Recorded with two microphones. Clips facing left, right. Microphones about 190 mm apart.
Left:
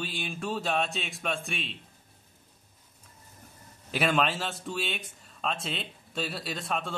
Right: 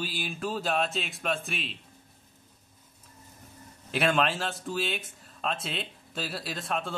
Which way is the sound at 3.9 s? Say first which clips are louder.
Right 1 dB; centre (ahead or behind).